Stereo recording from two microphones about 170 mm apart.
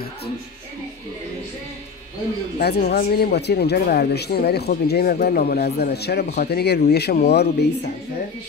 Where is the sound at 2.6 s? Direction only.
70° left (ahead or behind).